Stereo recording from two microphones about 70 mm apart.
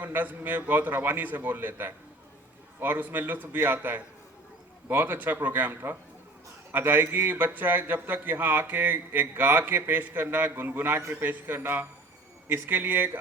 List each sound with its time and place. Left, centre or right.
0.0 s speech: right